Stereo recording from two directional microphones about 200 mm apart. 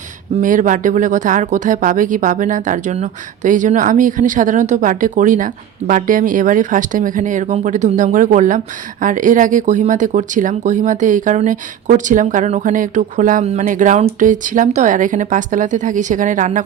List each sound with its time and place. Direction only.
0.4 s speech: 40° right (ahead or behind)